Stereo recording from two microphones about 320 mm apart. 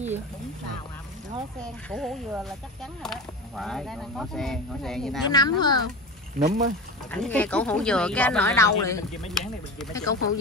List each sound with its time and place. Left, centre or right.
1.6 s speech: centre
5.3 s speech: centre
6.4 s speech: right
7.1 s speech: centre